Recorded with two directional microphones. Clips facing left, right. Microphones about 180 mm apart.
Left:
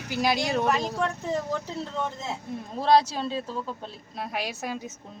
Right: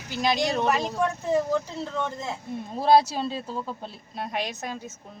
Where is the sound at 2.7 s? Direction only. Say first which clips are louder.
Right 2 dB; 5° right (ahead or behind); by 4.9 s 10° left (ahead or behind).